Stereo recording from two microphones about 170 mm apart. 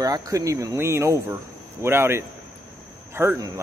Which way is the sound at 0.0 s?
20° right (ahead or behind).